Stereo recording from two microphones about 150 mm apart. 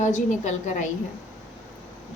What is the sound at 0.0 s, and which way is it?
Speech, 55° left (ahead or behind).